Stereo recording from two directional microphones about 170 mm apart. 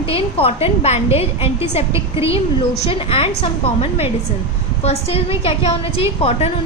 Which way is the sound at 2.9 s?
35° left (ahead or behind).